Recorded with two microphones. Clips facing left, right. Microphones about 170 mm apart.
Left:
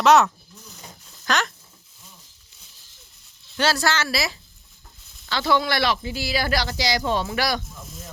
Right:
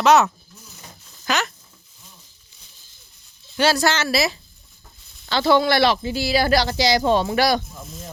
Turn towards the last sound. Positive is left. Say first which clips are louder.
# right 6 dB
turn(degrees=-30)  # may be behind; listen again after turning